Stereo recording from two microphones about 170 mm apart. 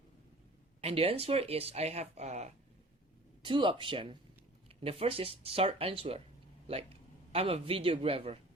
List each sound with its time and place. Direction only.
0.8 s speech: 35° right (ahead or behind)
3.4 s speech: 30° right (ahead or behind)